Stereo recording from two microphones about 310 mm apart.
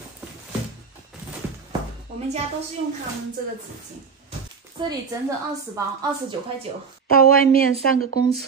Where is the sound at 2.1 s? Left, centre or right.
Right.